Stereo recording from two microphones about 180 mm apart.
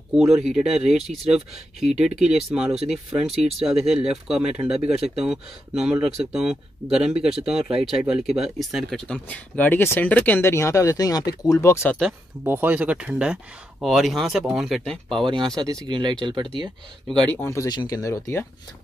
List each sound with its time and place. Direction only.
0.1 s speech: centre (ahead or behind); by 12.0 s 15° left (ahead or behind)
12.4 s speech: 10° right (ahead or behind)
15.5 s speech: 20° right (ahead or behind)
17.3 s speech: 10° left (ahead or behind)